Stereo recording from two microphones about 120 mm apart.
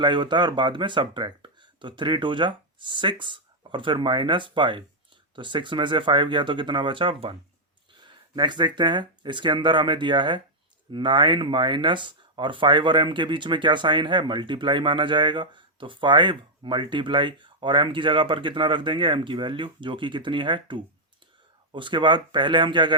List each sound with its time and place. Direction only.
0.0 s speech: 40° right (ahead or behind)